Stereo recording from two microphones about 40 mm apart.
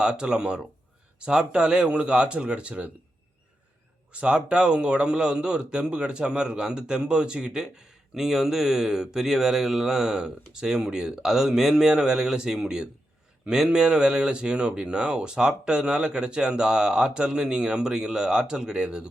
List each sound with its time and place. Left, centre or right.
0.0 s speech: right
4.1 s speech: right